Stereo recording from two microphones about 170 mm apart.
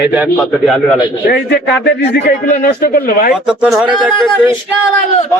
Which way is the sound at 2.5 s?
55° left (ahead or behind).